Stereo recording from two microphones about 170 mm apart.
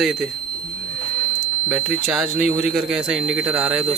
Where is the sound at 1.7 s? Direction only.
5° right (ahead or behind).